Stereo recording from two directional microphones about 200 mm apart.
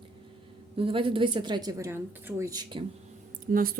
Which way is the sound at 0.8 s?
25° right (ahead or behind).